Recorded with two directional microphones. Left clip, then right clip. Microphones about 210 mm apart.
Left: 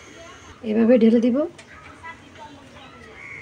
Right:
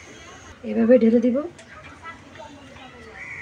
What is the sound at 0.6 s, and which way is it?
Speech, 40° left (ahead or behind).